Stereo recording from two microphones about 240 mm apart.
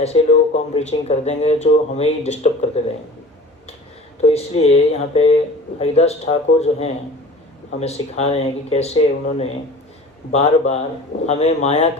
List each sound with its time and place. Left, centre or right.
0.0 s speech: left
4.2 s speech: left